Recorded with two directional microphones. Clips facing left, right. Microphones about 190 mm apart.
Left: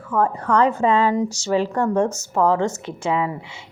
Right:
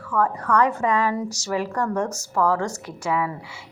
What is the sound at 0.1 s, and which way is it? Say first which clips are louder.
A woman's voice: left 2 dB; 25° left (ahead or behind).